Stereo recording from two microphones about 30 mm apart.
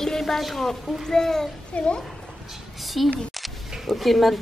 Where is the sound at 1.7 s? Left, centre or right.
Left.